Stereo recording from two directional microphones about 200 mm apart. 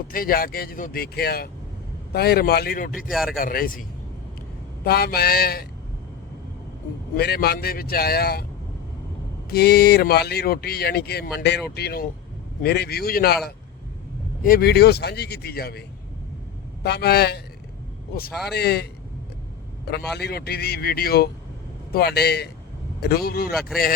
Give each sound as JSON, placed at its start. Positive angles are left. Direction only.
{"t": 0.1, "sound": "speech", "side_deg": 45}
{"t": 7.2, "sound": "speech", "side_deg": 55}
{"t": 9.5, "sound": "speech", "side_deg": 50}
{"t": 14.4, "sound": "speech", "side_deg": 50}
{"t": 16.8, "sound": "speech", "side_deg": 55}
{"t": 18.5, "sound": "a man's voice", "side_deg": 55}
{"t": 20.1, "sound": "speech", "side_deg": 55}